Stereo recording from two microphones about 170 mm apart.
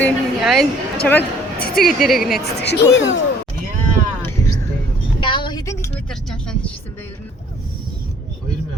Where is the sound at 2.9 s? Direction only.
90° left.